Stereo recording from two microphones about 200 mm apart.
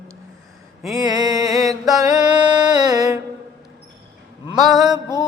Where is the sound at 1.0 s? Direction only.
20° right (ahead or behind).